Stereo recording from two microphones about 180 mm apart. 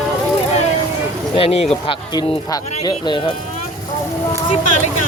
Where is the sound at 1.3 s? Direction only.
30° left (ahead or behind).